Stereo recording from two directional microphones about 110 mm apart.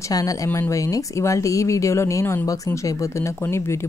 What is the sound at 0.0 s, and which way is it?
A woman's voice, 35° left (ahead or behind).